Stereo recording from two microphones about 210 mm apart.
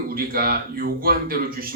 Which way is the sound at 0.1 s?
45° right (ahead or behind).